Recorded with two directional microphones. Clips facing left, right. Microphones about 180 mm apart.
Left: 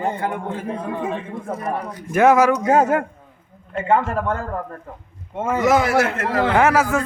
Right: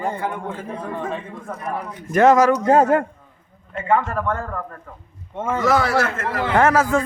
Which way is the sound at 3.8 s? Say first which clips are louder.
Left 1 dB; 25° left (ahead or behind).